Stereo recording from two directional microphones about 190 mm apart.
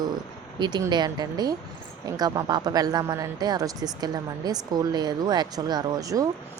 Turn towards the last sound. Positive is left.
turn(degrees=-20)  # may be behind; listen again after turning